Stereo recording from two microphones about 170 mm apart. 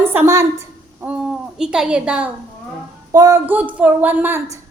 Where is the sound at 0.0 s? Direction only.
10° right (ahead or behind).